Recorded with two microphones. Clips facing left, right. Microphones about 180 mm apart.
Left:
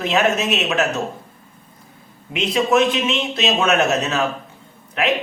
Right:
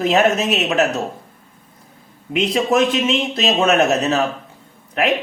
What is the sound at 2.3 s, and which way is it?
Speech, 40° right (ahead or behind).